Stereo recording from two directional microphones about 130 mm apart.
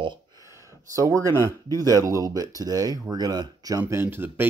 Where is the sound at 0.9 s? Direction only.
25° right (ahead or behind).